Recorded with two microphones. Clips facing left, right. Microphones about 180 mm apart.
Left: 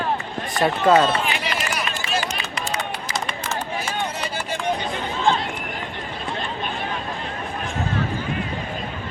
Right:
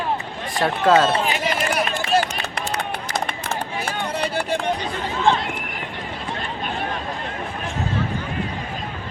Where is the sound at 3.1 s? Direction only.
55° right (ahead or behind).